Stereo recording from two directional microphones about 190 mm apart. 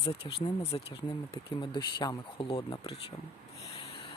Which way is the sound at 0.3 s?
30° left (ahead or behind).